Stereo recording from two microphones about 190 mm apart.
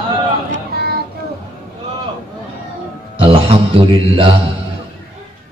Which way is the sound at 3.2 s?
30° right (ahead or behind).